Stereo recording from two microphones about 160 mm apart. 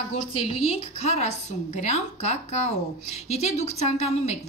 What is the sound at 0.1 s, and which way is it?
A woman's voice, 35° left (ahead or behind).